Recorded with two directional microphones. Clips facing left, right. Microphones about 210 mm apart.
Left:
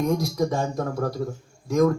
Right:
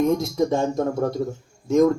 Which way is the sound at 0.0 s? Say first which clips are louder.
Right 3 dB; 25° right (ahead or behind).